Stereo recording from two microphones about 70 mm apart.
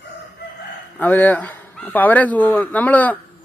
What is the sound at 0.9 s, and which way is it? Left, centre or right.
A man's voice, left.